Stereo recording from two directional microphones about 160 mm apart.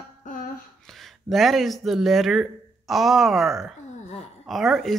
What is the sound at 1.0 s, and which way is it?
Speech, centre (ahead or behind).